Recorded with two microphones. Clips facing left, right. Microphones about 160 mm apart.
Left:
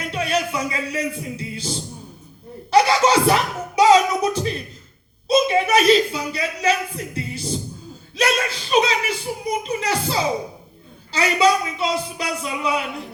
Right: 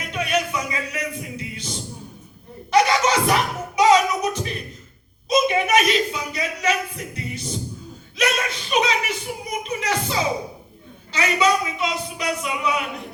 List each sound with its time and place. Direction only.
0.1 s music: 30° left (ahead or behind)
2.6 s a sound: 30° left (ahead or behind)
5.3 s speech: 30° left (ahead or behind)